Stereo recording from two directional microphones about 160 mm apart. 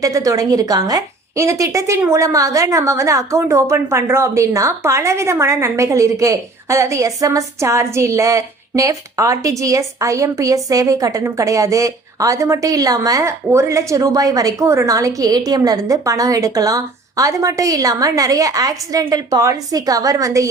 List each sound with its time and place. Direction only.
0.0 s a woman's voice: 20° right (ahead or behind)